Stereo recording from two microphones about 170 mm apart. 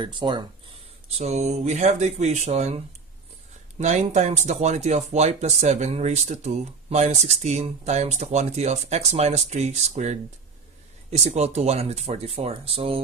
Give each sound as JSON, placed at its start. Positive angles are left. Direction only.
{"t": 0.0, "sound": "speech", "side_deg": -30}
{"t": 1.1, "sound": "speech", "side_deg": -40}